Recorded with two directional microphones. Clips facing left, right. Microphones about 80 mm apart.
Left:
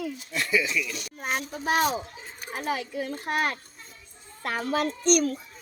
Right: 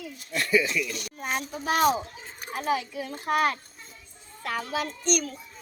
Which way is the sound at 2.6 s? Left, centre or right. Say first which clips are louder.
Right 2 dB; left.